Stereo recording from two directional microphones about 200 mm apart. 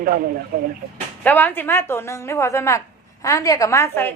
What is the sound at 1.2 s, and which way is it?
A woman's voice, 10° left (ahead or behind).